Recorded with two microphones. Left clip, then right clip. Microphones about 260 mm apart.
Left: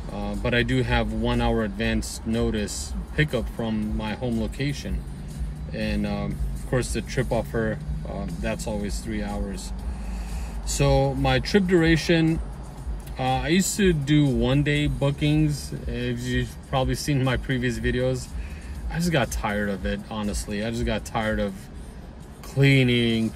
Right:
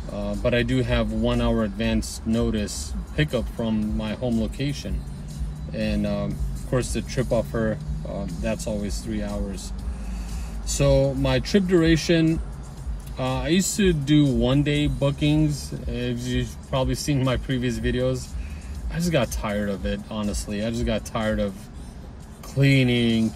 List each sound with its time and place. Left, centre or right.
0.4 s speech: centre
11.0 s speech: centre
13.4 s speech: centre
22.6 s speech: centre